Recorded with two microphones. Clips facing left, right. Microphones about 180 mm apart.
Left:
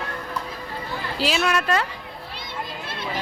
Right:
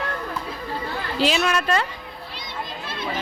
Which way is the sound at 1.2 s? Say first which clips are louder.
Right 1 dB; 5° left (ahead or behind).